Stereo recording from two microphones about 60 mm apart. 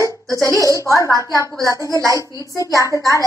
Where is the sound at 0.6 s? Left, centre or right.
Left.